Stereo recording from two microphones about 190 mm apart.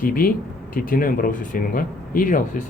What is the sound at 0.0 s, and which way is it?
A man's voice, 50° left (ahead or behind).